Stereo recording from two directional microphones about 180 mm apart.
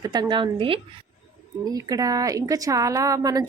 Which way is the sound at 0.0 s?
20° right (ahead or behind).